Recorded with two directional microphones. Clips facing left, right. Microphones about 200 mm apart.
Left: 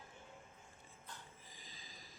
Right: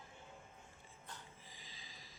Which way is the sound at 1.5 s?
45° left (ahead or behind).